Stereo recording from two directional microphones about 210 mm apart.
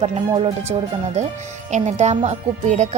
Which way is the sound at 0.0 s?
30° right (ahead or behind).